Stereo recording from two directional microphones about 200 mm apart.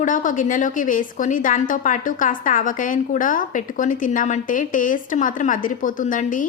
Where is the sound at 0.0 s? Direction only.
40° left (ahead or behind).